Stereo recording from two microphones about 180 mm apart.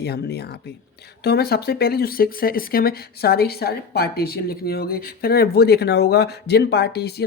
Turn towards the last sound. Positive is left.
turn(degrees=65)  # may be behind; listen again after turning